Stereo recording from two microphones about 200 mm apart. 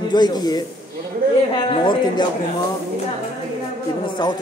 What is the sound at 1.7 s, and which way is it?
Speech, 20° left (ahead or behind).